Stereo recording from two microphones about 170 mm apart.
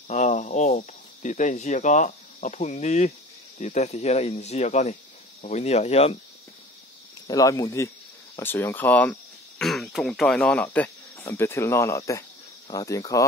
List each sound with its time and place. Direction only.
0.1 s speech: 45° left (ahead or behind)
7.2 s speech: 20° left (ahead or behind)